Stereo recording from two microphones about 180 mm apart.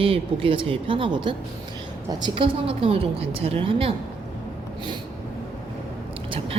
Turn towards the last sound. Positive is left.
turn(degrees=-30)  # may be behind; listen again after turning